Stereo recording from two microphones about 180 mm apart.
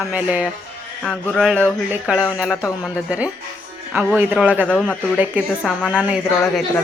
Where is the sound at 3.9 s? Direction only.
5° right (ahead or behind).